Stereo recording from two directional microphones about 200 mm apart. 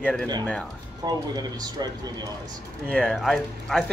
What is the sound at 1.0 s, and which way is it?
Speech, 20° right (ahead or behind).